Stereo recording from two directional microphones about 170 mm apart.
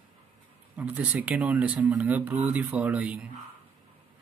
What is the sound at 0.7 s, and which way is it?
Speech, 10° right (ahead or behind).